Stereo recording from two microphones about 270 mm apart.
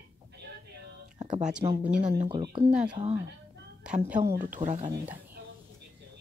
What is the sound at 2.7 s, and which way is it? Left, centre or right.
Speech, centre.